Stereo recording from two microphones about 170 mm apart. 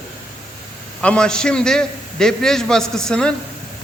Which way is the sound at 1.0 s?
5° left (ahead or behind).